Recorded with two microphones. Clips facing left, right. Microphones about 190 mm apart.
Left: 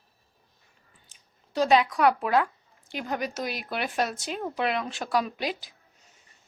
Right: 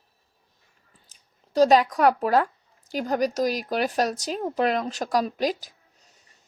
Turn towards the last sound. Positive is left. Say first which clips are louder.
# right 6 dB
turn(degrees=-40)  # may be behind; listen again after turning